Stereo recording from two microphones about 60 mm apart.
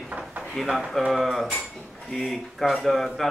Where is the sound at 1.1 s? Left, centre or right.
Centre.